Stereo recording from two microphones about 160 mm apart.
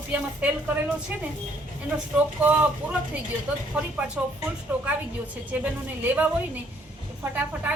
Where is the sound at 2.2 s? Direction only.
10° right (ahead or behind).